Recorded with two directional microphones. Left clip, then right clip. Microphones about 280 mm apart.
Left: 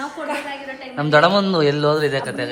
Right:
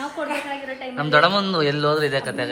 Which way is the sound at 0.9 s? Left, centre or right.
Centre.